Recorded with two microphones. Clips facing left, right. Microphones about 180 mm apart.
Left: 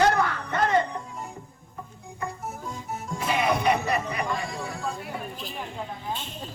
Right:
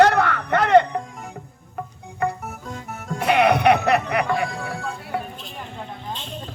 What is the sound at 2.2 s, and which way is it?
Music, 65° right (ahead or behind).